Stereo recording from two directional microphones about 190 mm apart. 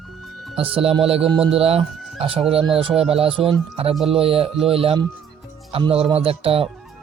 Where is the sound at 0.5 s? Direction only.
30° right (ahead or behind).